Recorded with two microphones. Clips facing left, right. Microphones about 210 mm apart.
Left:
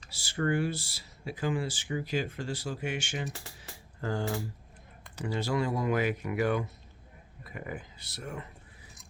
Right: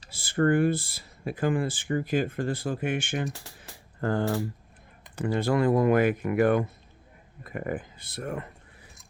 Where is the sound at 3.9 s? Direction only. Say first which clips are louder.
Right 6 dB; 55° right (ahead or behind).